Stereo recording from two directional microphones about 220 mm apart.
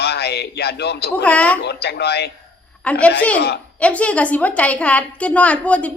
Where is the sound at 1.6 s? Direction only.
50° left (ahead or behind).